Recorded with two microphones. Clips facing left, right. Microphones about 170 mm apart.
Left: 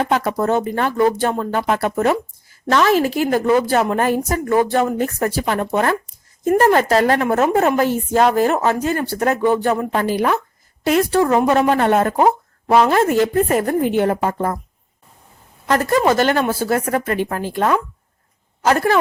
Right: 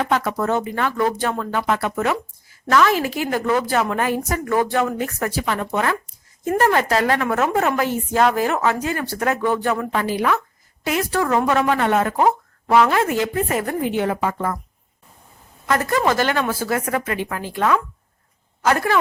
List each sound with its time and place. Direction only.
0.0 s a woman's voice: 35° left (ahead or behind)
0.9 s a woman's voice: 30° left (ahead or behind)
9.9 s a woman's voice: 40° left (ahead or behind)
12.1 s a woman's voice: 25° left (ahead or behind); by 14.3 s 45° left (ahead or behind)
14.3 s a woman's voice: 35° left (ahead or behind)
15.6 s a woman's voice: 35° left (ahead or behind)